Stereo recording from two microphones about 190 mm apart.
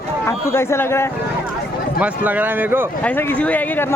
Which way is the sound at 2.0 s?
10° right (ahead or behind).